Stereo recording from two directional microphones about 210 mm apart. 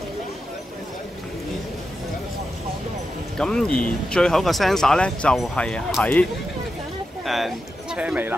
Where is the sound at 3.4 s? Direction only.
5° left (ahead or behind).